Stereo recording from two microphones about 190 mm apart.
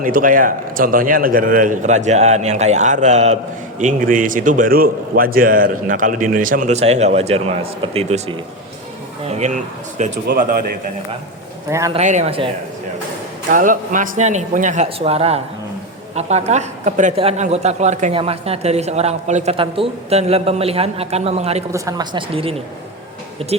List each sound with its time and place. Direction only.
0.0 s a man's voice: 45° right (ahead or behind)
10.2 s a man's voice: 50° right (ahead or behind)
11.9 s a man's voice: 35° right (ahead or behind)
13.5 s a man's voice: 45° right (ahead or behind)
21.7 s a woman's voice: 15° right (ahead or behind)